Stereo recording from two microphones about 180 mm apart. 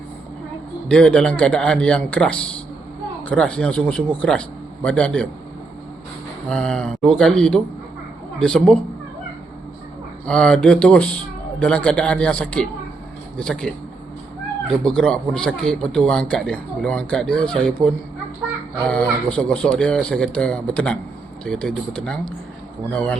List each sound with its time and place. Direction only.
0.9 s a man's voice: 5° left (ahead or behind)
6.5 s a man's voice: 5° left (ahead or behind)
10.2 s a man's voice: 5° left (ahead or behind)
14.8 s a man's voice: 5° left (ahead or behind)